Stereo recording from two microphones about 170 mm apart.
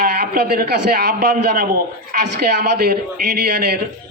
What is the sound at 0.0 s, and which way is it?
Speech, 65° right (ahead or behind).